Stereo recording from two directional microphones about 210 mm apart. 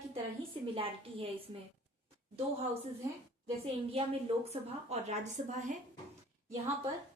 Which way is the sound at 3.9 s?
30° right (ahead or behind).